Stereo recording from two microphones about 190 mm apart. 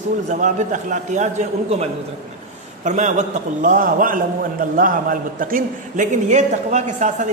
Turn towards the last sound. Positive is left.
turn(degrees=-40)  # may be behind; listen again after turning